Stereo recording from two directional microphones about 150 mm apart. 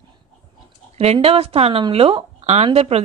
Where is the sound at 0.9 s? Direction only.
45° right (ahead or behind).